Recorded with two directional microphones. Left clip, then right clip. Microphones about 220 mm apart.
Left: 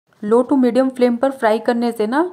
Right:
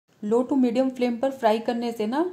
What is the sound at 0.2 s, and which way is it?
A woman's voice, 20° left (ahead or behind).